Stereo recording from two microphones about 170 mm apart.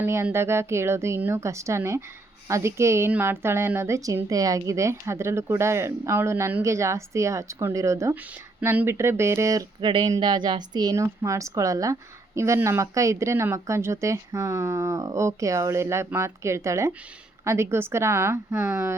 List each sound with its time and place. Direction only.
0.0 s speech: 15° right (ahead or behind)